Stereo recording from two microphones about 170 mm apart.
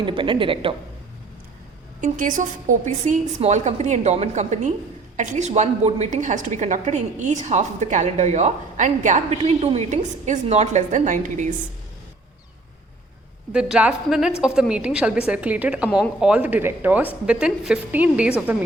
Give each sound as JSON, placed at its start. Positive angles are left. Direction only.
{"t": 0.0, "sound": "a woman's voice", "side_deg": -30}
{"t": 2.0, "sound": "a woman's voice", "side_deg": -50}
{"t": 13.5, "sound": "a woman's voice", "side_deg": -5}